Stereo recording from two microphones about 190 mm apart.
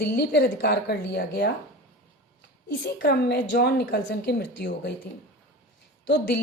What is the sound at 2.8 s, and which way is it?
Speech, 55° left (ahead or behind).